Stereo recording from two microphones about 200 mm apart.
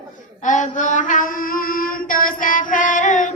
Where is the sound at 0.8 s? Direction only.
40° left (ahead or behind).